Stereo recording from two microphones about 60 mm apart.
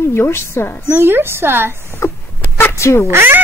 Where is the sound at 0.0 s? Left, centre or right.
Left.